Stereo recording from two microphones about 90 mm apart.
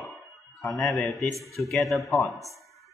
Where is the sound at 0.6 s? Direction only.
Centre (ahead or behind).